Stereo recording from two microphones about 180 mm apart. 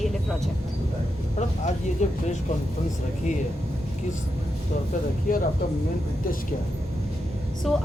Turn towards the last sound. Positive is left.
turn(degrees=0)  # may be behind; listen again after turning